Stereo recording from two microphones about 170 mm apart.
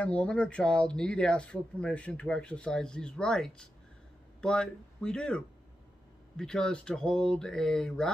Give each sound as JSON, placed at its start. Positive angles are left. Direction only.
{"t": 0.0, "sound": "speech", "side_deg": 5}